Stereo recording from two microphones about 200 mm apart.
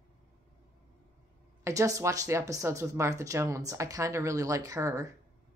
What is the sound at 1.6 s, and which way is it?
Speech, 15° right (ahead or behind).